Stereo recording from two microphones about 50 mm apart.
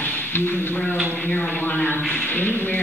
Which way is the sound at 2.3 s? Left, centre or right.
Left.